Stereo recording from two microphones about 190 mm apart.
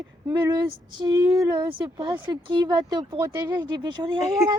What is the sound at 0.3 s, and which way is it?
Speech, 20° right (ahead or behind).